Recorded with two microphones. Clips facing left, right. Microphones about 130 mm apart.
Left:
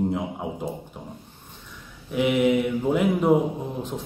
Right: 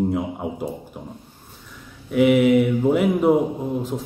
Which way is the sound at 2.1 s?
5° right (ahead or behind).